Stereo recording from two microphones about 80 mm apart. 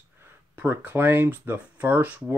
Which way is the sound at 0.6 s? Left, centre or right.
Right.